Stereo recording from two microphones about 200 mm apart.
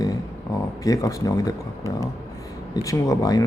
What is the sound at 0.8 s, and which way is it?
Speech, 15° left (ahead or behind).